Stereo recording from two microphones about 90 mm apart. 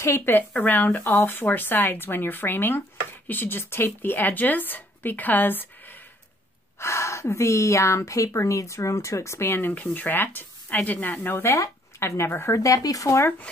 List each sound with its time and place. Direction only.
0.0 s a woman's voice: 30° left (ahead or behind)